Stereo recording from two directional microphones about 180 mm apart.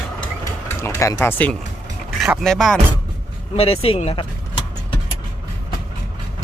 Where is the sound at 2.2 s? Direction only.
Centre (ahead or behind).